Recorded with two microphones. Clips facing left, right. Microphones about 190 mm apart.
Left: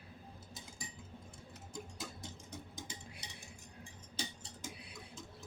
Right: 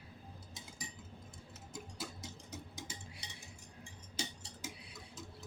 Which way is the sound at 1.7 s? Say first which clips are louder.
Even; 5° right (ahead or behind).